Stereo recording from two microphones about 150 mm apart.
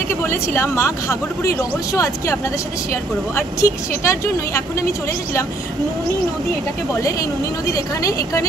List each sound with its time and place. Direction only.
0.3 s a woman's voice: 15° left (ahead or behind)
7.0 s speech: 20° left (ahead or behind)